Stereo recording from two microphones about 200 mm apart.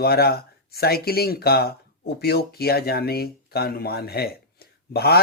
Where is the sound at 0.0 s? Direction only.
50° left (ahead or behind).